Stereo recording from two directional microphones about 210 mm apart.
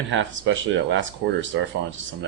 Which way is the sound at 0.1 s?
65° right (ahead or behind).